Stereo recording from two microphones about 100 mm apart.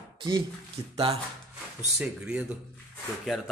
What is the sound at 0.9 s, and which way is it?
Speech, 75° right (ahead or behind).